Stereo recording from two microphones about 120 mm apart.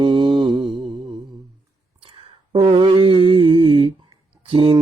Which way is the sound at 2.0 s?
50° right (ahead or behind).